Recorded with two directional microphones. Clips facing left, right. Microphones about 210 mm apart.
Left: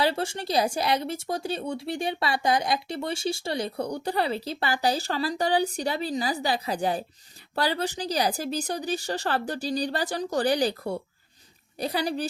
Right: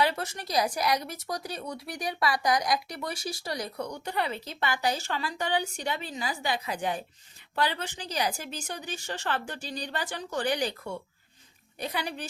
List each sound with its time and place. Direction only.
0.0 s speech: 30° left (ahead or behind)